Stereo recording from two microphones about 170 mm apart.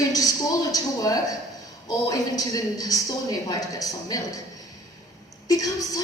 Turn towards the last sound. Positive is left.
turn(degrees=20)  # may be behind; listen again after turning